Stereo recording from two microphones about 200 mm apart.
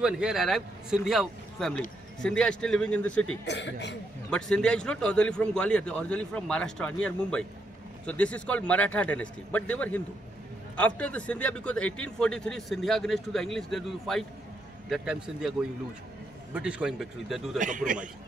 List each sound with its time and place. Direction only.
0.0 s a man's voice: 5° right (ahead or behind)
3.4 s a man's voice: 60° left (ahead or behind)
4.3 s a man's voice: 5° left (ahead or behind)
16.5 s a man's voice: 5° right (ahead or behind)
17.6 s a man's voice: 40° right (ahead or behind)